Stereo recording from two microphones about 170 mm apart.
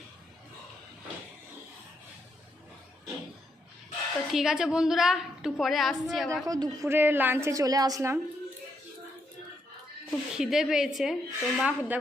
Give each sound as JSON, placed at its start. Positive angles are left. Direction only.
{"t": 4.3, "sound": "a woman's voice", "side_deg": 0}
{"t": 6.4, "sound": "a woman's voice", "side_deg": -20}
{"t": 10.1, "sound": "a woman's voice", "side_deg": 0}